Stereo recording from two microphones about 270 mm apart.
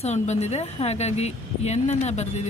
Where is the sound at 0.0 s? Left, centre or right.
Left.